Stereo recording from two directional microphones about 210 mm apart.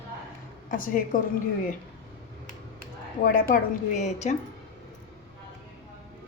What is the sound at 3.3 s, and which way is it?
A woman's voice, 40° left (ahead or behind).